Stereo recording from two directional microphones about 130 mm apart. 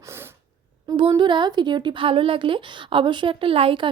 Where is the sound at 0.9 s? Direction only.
40° right (ahead or behind).